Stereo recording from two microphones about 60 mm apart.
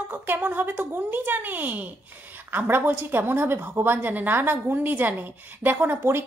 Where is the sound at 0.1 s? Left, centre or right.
Right.